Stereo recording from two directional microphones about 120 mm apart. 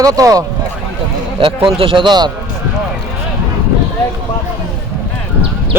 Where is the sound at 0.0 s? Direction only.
30° right (ahead or behind).